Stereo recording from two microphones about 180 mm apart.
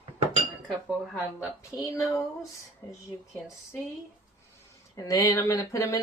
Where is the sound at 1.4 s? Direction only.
20° left (ahead or behind).